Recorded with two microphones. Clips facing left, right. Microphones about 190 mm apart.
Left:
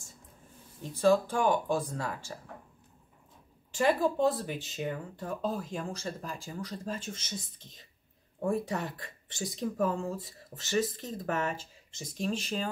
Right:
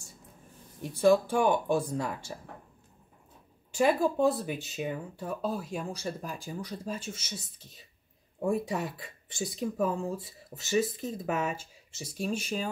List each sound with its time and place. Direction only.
0.8 s speech: 15° right (ahead or behind)
3.7 s speech: 10° right (ahead or behind)